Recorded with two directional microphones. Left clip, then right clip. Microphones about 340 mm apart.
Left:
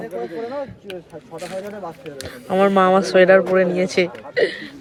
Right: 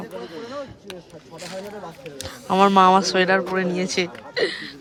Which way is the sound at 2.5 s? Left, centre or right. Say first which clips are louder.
Even; centre.